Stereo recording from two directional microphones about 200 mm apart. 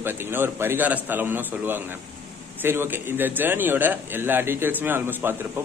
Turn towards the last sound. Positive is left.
turn(degrees=-10)  # may be behind; listen again after turning